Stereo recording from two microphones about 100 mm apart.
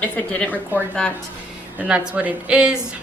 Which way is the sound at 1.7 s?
10° right (ahead or behind).